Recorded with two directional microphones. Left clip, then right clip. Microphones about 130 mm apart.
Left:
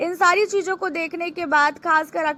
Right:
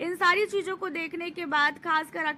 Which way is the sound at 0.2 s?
35° left (ahead or behind).